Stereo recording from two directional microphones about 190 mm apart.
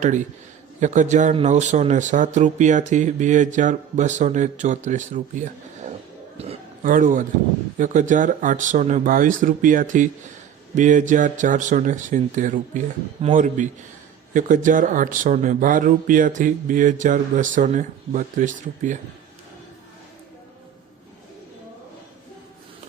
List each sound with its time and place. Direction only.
0.0 s speech: 40° right (ahead or behind)
6.3 s a sound: 30° right (ahead or behind)
6.8 s speech: 45° right (ahead or behind)